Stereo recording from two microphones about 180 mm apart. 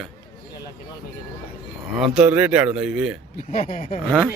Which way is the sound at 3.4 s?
50° left (ahead or behind).